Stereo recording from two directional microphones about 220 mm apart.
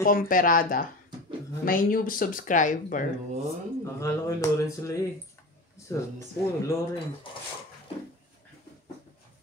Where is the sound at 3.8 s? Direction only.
15° left (ahead or behind).